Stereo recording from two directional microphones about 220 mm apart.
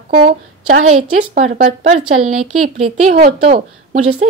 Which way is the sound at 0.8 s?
80° right.